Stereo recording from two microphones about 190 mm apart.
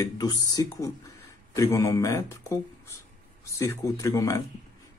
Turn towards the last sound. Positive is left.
turn(degrees=15)  # may be behind; listen again after turning